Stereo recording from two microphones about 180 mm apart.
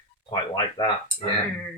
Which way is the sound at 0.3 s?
25° left (ahead or behind).